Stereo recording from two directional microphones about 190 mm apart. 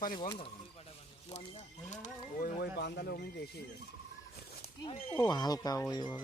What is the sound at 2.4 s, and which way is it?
Speech, 60° left (ahead or behind).